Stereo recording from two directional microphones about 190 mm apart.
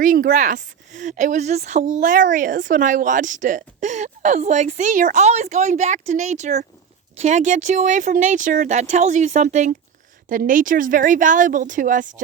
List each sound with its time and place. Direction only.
0.0 s a woman's voice: 45° right (ahead or behind)